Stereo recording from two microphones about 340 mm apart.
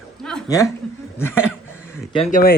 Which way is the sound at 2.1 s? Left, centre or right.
Centre.